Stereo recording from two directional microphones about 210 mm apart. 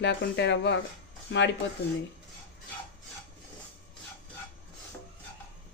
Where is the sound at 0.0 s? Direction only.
55° left (ahead or behind).